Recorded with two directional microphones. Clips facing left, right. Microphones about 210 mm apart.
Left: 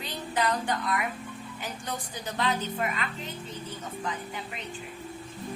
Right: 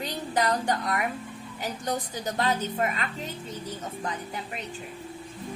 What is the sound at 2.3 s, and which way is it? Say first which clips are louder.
Speech: right 2 dB; 40° right (ahead or behind).